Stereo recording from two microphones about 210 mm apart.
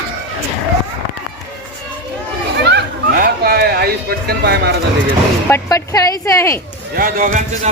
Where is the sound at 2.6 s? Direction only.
50° right (ahead or behind).